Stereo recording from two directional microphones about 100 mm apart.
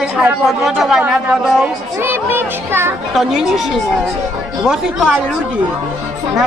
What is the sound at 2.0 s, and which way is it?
Music, 20° right (ahead or behind).